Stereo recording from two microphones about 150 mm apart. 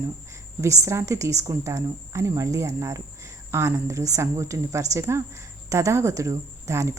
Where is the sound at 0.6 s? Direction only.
20° right (ahead or behind).